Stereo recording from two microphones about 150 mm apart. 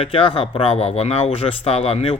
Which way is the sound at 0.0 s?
35° left (ahead or behind).